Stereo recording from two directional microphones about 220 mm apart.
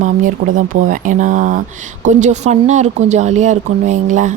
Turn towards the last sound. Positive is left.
turn(degrees=-35)  # may be behind; listen again after turning